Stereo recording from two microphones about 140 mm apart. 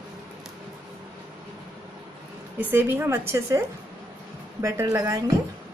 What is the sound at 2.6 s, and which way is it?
A woman's voice, 15° right (ahead or behind).